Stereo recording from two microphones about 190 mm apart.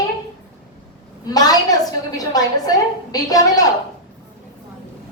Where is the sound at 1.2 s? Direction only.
20° left (ahead or behind).